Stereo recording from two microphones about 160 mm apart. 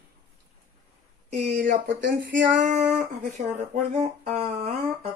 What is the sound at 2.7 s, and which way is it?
Speech, 50° right (ahead or behind).